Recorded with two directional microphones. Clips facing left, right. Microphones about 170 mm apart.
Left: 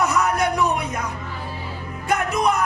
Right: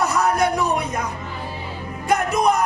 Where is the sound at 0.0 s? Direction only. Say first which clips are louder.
Right 1 dB; 35° right (ahead or behind).